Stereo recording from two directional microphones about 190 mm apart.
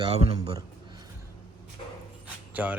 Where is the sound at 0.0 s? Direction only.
30° right (ahead or behind).